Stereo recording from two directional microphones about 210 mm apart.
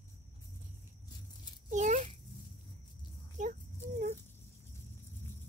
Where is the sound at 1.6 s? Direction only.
35° right (ahead or behind).